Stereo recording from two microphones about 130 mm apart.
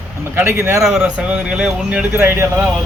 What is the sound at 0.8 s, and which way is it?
Speech, 5° right (ahead or behind).